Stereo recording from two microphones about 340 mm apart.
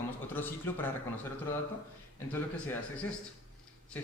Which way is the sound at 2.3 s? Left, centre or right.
Centre.